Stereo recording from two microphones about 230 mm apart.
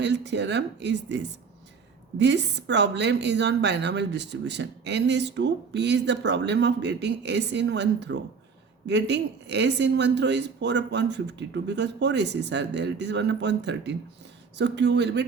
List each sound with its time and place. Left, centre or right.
0.0 s a woman's voice: right